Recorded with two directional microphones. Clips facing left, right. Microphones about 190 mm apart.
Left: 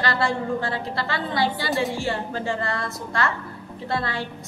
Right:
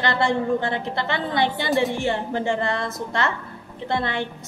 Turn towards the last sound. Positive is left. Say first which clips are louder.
# right 2 dB
turn(degrees=-20)  # may be behind; listen again after turning